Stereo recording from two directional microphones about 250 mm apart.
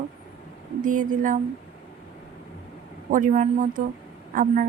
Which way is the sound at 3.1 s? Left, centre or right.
Right.